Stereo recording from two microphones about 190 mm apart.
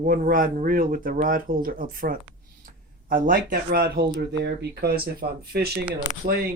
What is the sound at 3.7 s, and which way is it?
Speech, 55° right (ahead or behind).